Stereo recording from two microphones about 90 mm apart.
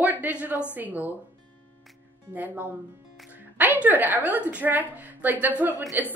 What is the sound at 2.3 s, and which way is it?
A woman's voice, 20° right (ahead or behind).